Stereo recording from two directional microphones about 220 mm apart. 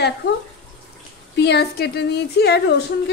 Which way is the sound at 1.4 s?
50° left (ahead or behind).